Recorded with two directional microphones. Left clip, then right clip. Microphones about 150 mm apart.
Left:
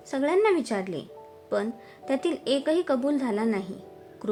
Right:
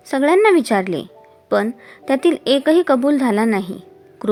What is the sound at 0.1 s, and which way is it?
A woman's voice, 50° right (ahead or behind).